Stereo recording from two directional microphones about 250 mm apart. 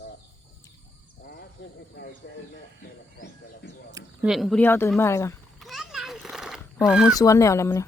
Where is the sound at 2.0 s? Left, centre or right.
Left.